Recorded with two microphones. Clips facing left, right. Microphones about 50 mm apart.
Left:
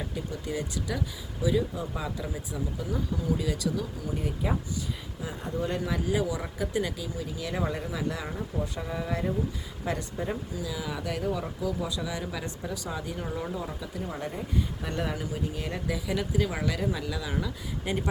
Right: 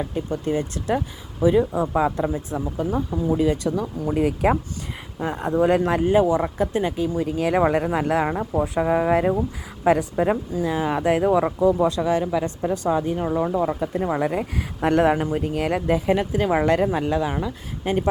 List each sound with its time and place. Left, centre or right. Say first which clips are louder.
0.1 s speech: right 9 dB; right
4.1 s speech: right 13 dB; right
5.2 s speech: right 12 dB; right
7.0 s speech: right 12 dB; right
8.8 s speech: right 15 dB; right
10.2 s a woman's voice: right 12 dB; right
10.5 s speech: right 11 dB; right
12.2 s a woman's voice: right 12 dB; right
12.6 s speech: right 13 dB; right
13.5 s speech: right 12 dB; right
14.0 s speech: right 10 dB; right